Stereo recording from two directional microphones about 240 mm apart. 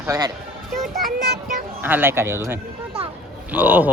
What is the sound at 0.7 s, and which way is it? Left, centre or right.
Children playing, centre.